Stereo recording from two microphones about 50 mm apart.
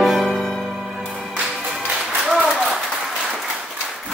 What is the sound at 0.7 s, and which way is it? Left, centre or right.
Music, centre.